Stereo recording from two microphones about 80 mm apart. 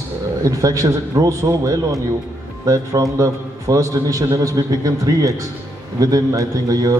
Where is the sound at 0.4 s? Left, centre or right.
Right.